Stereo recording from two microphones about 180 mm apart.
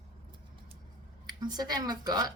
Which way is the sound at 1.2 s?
20° right (ahead or behind).